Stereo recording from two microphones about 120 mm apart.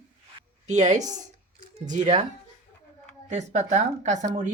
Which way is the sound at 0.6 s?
85° right.